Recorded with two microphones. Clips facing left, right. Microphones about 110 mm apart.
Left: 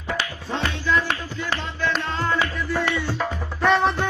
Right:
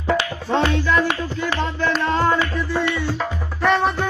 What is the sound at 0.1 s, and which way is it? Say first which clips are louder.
Music: right 7 dB; 75° right (ahead or behind).